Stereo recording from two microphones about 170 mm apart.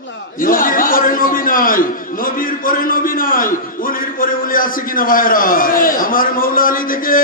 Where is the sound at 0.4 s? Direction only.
55° left (ahead or behind).